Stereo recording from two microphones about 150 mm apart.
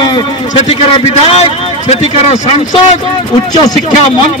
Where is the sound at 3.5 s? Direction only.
25° left (ahead or behind).